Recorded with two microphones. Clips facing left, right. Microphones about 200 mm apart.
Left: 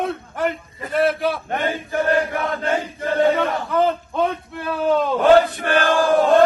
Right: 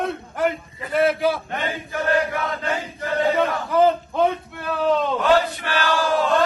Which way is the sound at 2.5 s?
55° left (ahead or behind).